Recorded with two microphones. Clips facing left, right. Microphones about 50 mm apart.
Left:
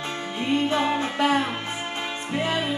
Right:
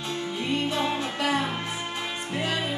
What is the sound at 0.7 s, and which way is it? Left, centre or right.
Music, left.